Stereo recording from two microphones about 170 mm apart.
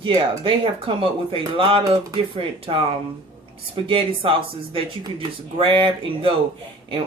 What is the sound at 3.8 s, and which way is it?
Speech, 30° right (ahead or behind).